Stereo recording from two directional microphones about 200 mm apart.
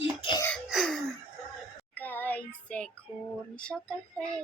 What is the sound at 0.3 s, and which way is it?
Cough, 20° left (ahead or behind).